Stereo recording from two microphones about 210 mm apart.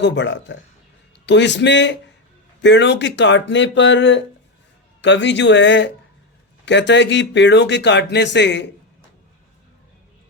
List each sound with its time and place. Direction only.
0.0 s speech: 60° left (ahead or behind)